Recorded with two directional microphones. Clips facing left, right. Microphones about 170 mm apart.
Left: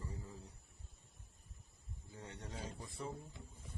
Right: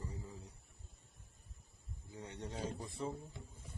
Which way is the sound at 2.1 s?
15° right (ahead or behind).